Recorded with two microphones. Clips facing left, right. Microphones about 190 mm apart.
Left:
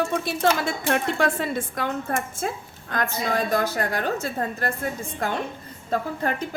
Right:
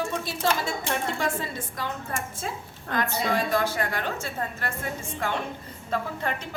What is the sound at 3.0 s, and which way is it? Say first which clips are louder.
A woman's voice: left 1 dB; 40° left (ahead or behind).